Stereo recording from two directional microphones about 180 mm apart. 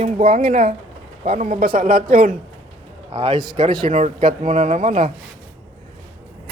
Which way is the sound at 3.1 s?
25° right (ahead or behind).